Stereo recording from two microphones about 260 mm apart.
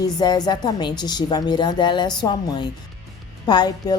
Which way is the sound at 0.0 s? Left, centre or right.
Centre.